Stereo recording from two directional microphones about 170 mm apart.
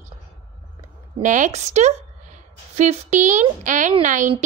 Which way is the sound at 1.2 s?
45° right (ahead or behind).